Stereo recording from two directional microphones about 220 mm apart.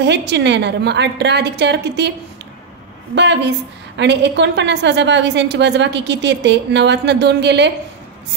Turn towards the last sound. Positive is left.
turn(degrees=-50)  # may be behind; listen again after turning